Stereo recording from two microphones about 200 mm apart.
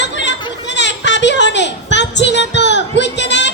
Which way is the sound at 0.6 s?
60° left (ahead or behind).